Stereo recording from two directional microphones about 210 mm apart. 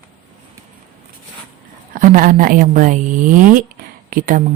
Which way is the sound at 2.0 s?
40° right (ahead or behind).